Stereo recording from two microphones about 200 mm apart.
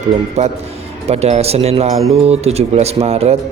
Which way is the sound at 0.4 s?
35° right (ahead or behind).